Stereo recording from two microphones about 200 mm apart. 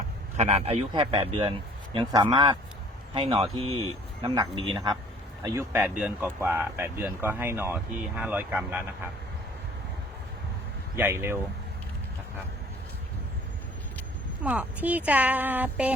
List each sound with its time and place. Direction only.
0.3 s a man's voice: 30° right (ahead or behind); by 9.0 s 10° right (ahead or behind)
10.9 s speech: 10° right (ahead or behind)
14.4 s speech: 5° right (ahead or behind)